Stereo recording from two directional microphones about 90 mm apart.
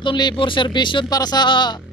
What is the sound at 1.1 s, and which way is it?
Speech, 50° left (ahead or behind).